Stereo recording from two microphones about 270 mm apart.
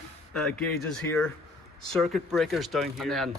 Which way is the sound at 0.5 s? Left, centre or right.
Centre.